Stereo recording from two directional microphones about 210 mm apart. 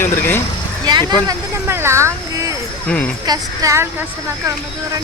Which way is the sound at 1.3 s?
10° right (ahead or behind).